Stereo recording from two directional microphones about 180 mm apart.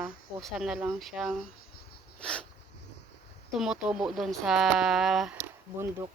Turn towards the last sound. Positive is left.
turn(degrees=-15)  # may be behind; listen again after turning